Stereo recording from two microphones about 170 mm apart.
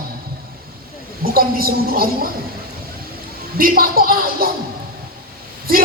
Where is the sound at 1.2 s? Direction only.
60° right (ahead or behind).